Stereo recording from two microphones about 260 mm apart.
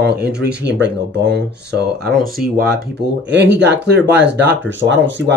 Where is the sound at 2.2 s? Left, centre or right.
Right.